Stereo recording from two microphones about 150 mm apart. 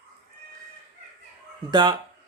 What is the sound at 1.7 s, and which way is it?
Speech, 30° right (ahead or behind).